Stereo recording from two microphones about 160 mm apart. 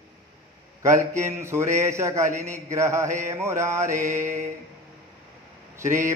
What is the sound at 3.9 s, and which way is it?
Mantra, 50° right (ahead or behind).